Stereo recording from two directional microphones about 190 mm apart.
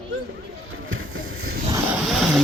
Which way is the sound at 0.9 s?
90° right.